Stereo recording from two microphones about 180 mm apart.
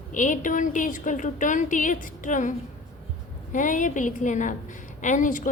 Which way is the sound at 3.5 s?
45° left (ahead or behind).